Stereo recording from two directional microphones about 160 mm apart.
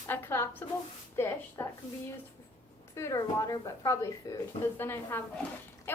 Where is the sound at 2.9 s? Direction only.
20° left (ahead or behind).